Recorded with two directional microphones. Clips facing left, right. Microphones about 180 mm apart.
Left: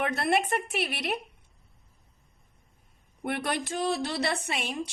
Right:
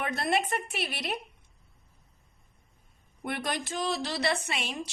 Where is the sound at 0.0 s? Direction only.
60° left (ahead or behind).